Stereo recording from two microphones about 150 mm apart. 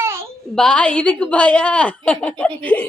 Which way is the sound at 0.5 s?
5° left (ahead or behind).